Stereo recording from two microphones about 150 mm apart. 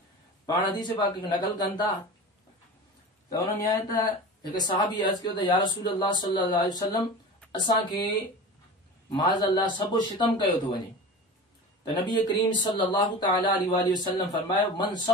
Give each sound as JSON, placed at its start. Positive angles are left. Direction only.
{"t": 0.5, "sound": "speech", "side_deg": 30}
{"t": 3.3, "sound": "speech", "side_deg": 25}
{"t": 9.1, "sound": "speech", "side_deg": 30}
{"t": 12.1, "sound": "speech", "side_deg": 30}